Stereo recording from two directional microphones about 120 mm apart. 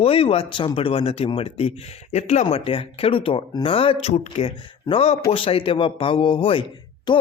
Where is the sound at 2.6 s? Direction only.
50° left (ahead or behind).